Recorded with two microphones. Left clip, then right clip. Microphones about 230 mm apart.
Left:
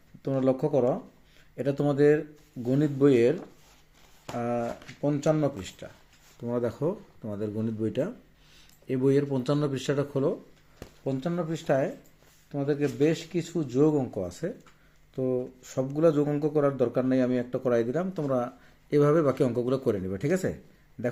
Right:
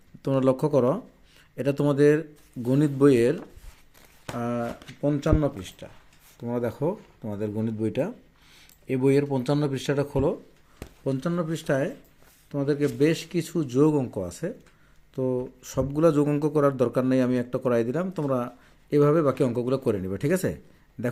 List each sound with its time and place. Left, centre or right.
0.2 s speech: right
4.4 s speech: right
10.8 s a man's voice: right